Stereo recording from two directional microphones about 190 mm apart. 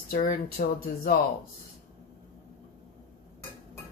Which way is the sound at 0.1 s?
45° left (ahead or behind).